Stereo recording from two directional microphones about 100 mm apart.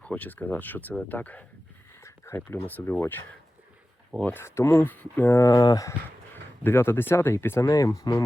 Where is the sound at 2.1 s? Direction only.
25° left (ahead or behind).